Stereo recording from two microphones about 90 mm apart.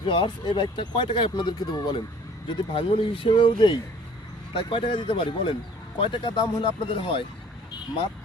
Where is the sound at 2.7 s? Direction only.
85° left; by 3.8 s 60° left (ahead or behind).